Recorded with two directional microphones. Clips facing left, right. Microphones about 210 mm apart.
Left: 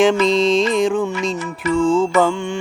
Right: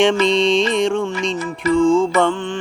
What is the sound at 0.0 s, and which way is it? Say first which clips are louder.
Music: left 1 dB; centre (ahead or behind).